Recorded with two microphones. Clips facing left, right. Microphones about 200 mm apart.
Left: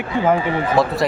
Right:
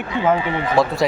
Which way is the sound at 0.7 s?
Centre (ahead or behind).